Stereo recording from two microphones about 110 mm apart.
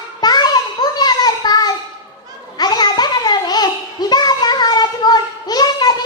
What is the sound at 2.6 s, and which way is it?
Babbling, 40° left (ahead or behind).